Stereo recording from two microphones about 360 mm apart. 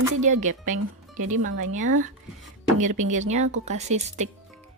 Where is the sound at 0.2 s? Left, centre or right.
Centre.